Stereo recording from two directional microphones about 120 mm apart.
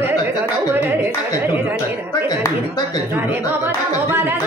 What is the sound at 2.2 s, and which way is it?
Speech, 35° left (ahead or behind).